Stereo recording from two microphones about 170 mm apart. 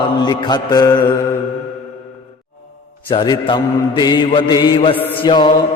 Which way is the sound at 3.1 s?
30° left (ahead or behind).